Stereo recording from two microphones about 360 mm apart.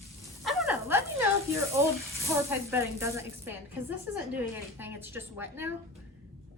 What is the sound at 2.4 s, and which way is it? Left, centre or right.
Speech, centre.